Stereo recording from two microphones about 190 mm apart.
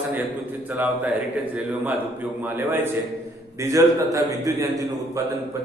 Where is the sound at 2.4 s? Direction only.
10° right (ahead or behind).